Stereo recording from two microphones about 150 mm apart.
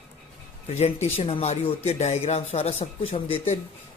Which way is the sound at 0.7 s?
50° left (ahead or behind).